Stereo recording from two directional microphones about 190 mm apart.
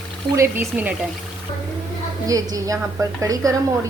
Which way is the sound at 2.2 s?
20° right (ahead or behind).